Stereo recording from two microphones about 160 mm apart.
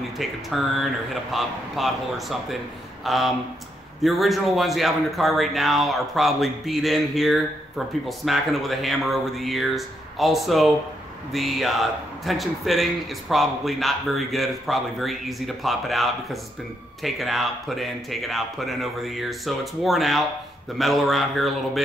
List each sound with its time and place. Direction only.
0.2 s speech: centre (ahead or behind)